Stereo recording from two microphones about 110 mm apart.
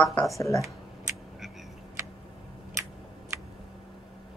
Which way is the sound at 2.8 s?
25° right (ahead or behind).